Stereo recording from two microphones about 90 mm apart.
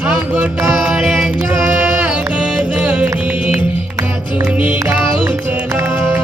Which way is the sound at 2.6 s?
10° right (ahead or behind).